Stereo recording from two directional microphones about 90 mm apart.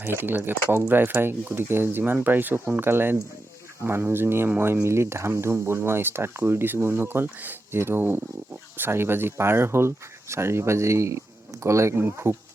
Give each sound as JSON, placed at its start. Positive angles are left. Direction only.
{"t": 0.0, "sound": "speech", "side_deg": -25}